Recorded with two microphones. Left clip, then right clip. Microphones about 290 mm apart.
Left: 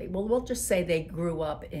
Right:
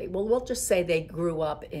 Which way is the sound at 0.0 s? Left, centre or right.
Centre.